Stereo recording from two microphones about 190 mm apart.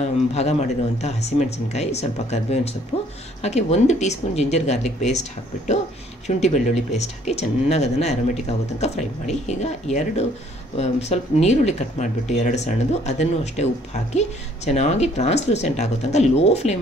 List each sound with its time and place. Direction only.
0.0 s speech: 35° left (ahead or behind)
6.2 s speech: 40° left (ahead or behind)